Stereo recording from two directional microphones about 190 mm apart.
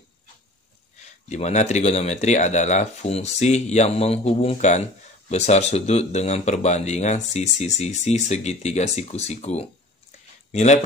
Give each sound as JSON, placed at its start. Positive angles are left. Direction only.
{"t": 1.3, "sound": "speech", "side_deg": 40}